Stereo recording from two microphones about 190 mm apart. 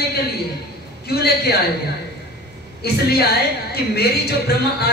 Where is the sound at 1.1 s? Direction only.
55° left (ahead or behind).